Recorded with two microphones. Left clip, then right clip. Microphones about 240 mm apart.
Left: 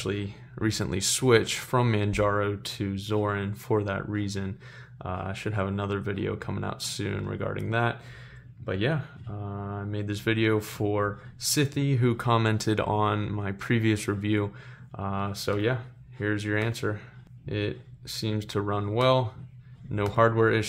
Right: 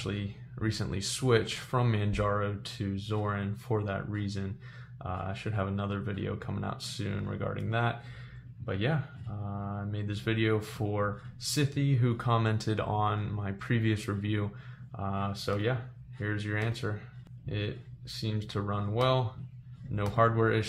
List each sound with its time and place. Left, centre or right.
0.0 s speech: left